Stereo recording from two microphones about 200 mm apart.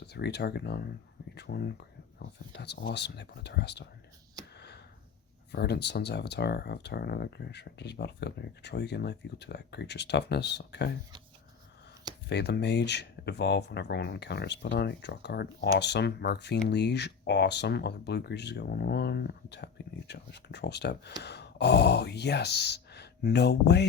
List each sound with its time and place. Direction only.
0.0 s speech: 55° left (ahead or behind)
4.5 s a sound: 55° left (ahead or behind)
5.5 s speech: 55° left (ahead or behind)
12.3 s speech: 55° left (ahead or behind)